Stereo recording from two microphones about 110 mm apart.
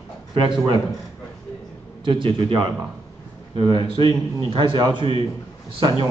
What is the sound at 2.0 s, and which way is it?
A man's voice, 50° right (ahead or behind).